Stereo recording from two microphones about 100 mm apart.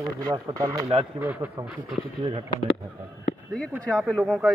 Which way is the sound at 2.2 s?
60° right (ahead or behind).